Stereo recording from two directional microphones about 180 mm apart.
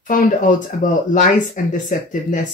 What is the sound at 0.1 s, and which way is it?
Speech, 50° left (ahead or behind).